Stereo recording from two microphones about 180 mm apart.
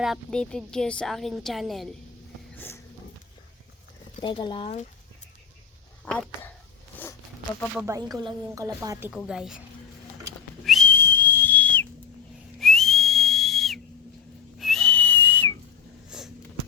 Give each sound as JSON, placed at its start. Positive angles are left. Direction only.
{"t": 0.0, "sound": "a woman's voice", "side_deg": 0}
{"t": 2.6, "sound": "a sound", "side_deg": 10}
{"t": 4.2, "sound": "speech", "side_deg": 25}
{"t": 6.1, "sound": "speech", "side_deg": 5}
{"t": 6.9, "sound": "zipper", "side_deg": 10}
{"t": 7.8, "sound": "a woman's voice", "side_deg": -15}
{"t": 10.6, "sound": "whistle", "side_deg": 0}
{"t": 10.8, "sound": "whistle", "side_deg": 10}
{"t": 16.0, "sound": "a sound", "side_deg": 0}